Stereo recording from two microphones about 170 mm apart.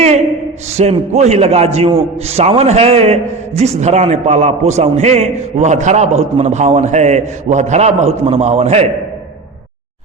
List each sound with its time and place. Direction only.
0.8 s a man's voice: 40° right (ahead or behind)